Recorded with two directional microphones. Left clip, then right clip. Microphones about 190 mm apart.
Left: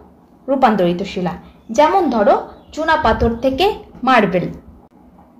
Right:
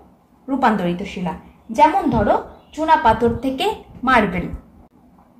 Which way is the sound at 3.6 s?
50° left (ahead or behind).